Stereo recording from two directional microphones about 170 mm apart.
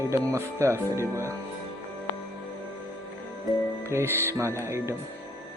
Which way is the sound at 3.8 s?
15° right (ahead or behind).